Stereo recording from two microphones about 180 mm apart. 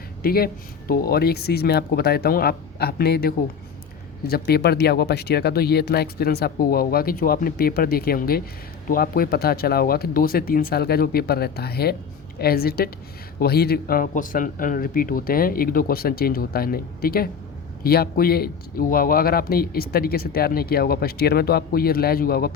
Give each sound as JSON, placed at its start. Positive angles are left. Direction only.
{"t": 0.2, "sound": "speech", "side_deg": 55}